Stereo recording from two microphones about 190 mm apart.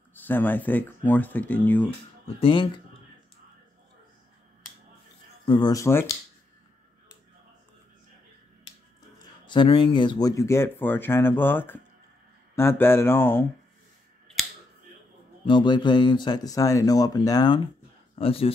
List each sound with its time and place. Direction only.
0.1 s speech: 10° left (ahead or behind)
2.2 s speech: 30° left (ahead or behind)
5.4 s speech: 25° left (ahead or behind)
9.5 s speech: 25° left (ahead or behind)
15.4 s speech: 25° left (ahead or behind)
18.1 s speech: 30° left (ahead or behind)